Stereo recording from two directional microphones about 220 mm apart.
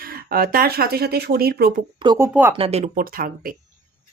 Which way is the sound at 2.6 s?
30° right (ahead or behind).